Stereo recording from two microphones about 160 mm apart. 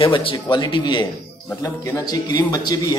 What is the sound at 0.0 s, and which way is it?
A man's voice, 35° left (ahead or behind).